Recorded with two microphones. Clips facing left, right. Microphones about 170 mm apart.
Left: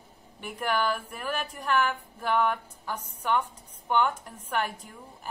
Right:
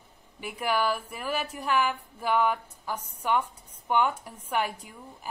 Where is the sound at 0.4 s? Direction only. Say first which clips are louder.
Right 1 dB; 5° right (ahead or behind).